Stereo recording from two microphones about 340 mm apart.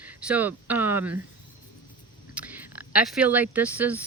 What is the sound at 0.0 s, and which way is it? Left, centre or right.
Speech, centre.